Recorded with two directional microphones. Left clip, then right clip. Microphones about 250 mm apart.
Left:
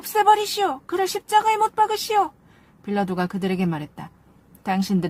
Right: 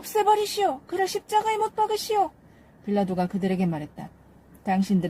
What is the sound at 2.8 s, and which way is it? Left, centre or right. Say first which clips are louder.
Speech: left 1 dB; left.